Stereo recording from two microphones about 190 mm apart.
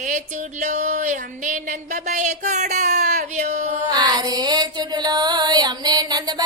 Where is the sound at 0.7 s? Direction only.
40° right (ahead or behind).